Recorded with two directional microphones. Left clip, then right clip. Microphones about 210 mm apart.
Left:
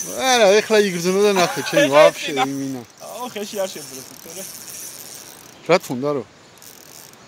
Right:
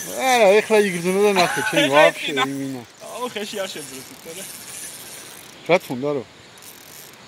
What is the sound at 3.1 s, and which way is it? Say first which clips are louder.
Speech: left 1 dB; 50° left (ahead or behind).